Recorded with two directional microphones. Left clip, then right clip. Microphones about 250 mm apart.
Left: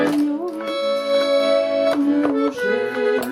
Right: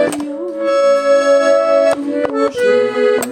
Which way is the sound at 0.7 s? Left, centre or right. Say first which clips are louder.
Right 9 dB; right.